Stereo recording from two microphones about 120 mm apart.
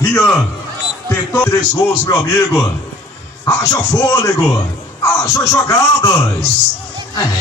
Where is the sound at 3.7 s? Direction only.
25° left (ahead or behind).